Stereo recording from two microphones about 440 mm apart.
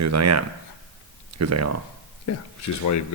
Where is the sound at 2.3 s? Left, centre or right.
Left.